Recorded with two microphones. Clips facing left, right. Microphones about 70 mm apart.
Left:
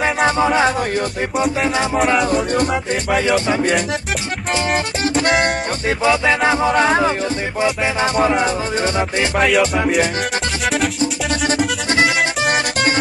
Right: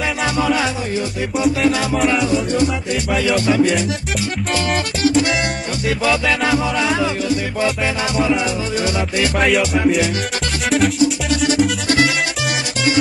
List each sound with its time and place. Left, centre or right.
0.0 s music: left
2.2 s music: left
3.3 s music: left
5.0 s music: left
5.9 s music: left
6.7 s music: left
9.4 s music: centre